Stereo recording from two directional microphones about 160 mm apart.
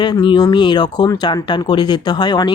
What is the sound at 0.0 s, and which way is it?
Speech, 30° left (ahead or behind).